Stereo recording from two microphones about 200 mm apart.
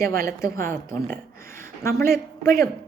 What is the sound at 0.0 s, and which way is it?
Speech, 50° right (ahead or behind).